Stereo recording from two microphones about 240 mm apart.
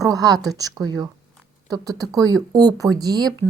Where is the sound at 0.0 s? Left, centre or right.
Centre.